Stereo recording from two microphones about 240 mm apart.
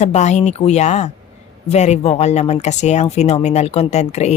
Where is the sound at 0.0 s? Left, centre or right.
Left.